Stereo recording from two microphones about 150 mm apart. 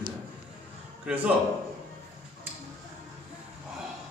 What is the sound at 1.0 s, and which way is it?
Speech, 10° right (ahead or behind).